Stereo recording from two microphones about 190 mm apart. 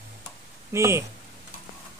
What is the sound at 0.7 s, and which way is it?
Speech, 15° right (ahead or behind).